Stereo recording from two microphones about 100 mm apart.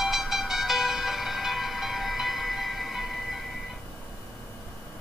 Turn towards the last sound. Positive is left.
turn(degrees=0)  # may be behind; listen again after turning